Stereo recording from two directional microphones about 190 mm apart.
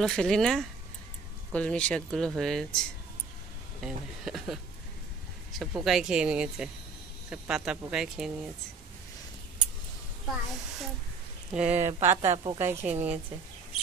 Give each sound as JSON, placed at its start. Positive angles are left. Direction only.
{"t": 0.0, "sound": "speech", "side_deg": 5}
{"t": 3.8, "sound": "speech", "side_deg": 0}
{"t": 5.9, "sound": "speech", "side_deg": -5}
{"t": 10.2, "sound": "a woman's voice", "side_deg": 0}
{"t": 11.9, "sound": "a woman's voice", "side_deg": -35}
{"t": 12.5, "sound": "speech", "side_deg": -10}